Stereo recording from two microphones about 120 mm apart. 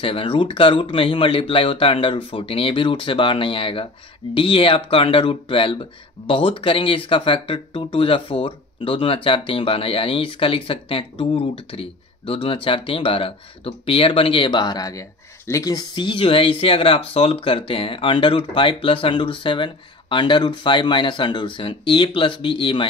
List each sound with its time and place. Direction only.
0.0 s speech: 50° left (ahead or behind)